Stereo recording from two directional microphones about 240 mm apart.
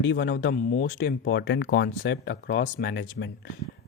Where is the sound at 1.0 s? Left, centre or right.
Left.